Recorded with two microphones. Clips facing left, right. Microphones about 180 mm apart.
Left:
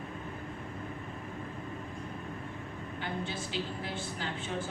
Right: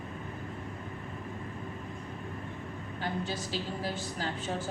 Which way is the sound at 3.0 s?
40° right (ahead or behind).